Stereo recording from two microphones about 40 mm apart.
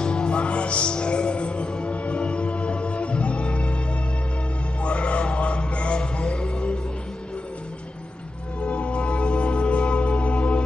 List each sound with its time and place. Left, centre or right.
0.0 s music: left
4.8 s music: left
8.6 s music: left